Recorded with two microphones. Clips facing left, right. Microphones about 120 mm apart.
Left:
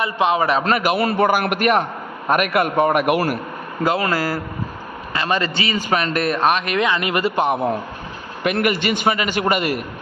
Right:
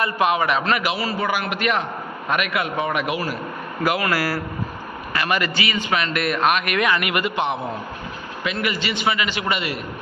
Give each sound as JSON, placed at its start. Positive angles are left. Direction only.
{"t": 0.0, "sound": "a man's voice", "side_deg": 25}
{"t": 3.8, "sound": "a man's voice", "side_deg": 25}